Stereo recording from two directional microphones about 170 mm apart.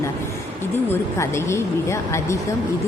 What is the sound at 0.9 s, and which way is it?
A woman's voice, 15° left (ahead or behind).